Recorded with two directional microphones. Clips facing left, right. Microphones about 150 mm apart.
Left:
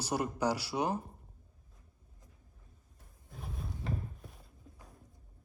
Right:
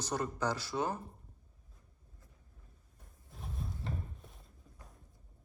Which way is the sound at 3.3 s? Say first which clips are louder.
Even; centre (ahead or behind).